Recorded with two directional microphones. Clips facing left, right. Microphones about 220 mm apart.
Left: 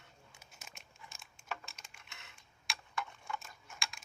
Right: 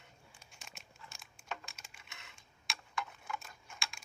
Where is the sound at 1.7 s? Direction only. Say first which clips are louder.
Even; centre (ahead or behind).